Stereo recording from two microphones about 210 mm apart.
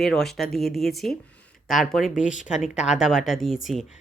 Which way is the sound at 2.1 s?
35° left (ahead or behind).